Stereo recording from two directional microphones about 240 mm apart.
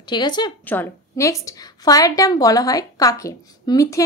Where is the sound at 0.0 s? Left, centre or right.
Centre.